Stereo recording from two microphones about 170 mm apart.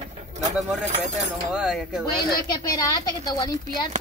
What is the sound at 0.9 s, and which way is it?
Speech, 40° right (ahead or behind).